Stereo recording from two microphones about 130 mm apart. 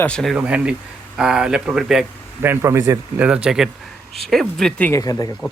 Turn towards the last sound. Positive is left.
turn(degrees=30)  # may be behind; listen again after turning